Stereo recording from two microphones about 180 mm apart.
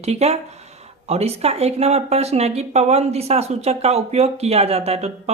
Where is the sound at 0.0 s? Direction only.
35° right (ahead or behind).